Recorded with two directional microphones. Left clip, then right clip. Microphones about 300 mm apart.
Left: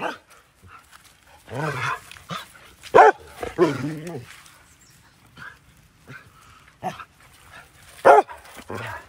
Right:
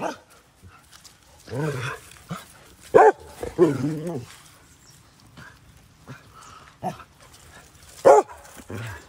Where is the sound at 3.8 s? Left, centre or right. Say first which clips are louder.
Right 3 dB; centre.